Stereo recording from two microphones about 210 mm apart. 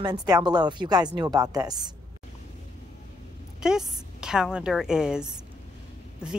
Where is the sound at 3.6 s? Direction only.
5° right (ahead or behind).